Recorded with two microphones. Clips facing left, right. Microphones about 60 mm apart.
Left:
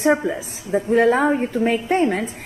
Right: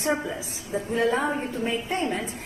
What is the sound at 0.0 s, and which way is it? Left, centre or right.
A woman's voice, left.